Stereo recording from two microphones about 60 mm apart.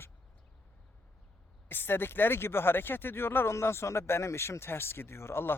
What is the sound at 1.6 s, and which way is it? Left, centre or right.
Speech, left.